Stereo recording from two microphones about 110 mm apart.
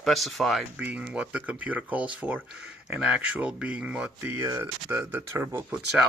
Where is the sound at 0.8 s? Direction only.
10° right (ahead or behind).